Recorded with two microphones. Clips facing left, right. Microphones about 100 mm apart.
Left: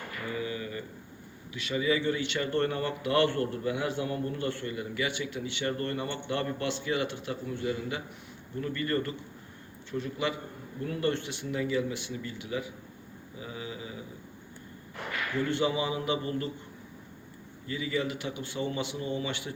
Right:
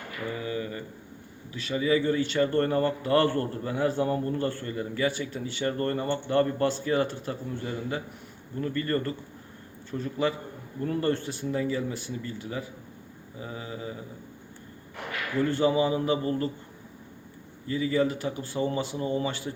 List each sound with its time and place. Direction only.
0.3 s a sound: 30° right (ahead or behind)
1.5 s a man's voice: 35° right (ahead or behind)
15.4 s a man's voice: 40° right (ahead or behind)
17.7 s a man's voice: 35° right (ahead or behind)